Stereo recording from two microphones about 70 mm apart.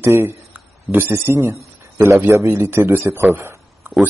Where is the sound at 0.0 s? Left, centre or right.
Right.